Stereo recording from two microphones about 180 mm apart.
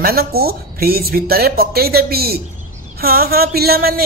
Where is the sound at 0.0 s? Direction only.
55° right (ahead or behind).